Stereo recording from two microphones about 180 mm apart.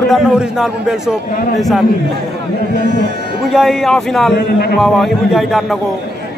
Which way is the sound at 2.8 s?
70° right (ahead or behind).